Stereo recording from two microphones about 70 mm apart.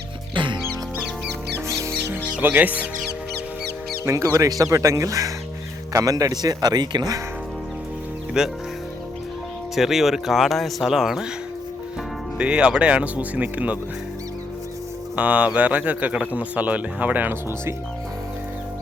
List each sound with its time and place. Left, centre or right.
1.5 s music: right
2.4 s speech: right
4.0 s speech: right
8.4 s speech: centre
9.7 s speech: centre
12.4 s speech: centre
15.1 s speech: centre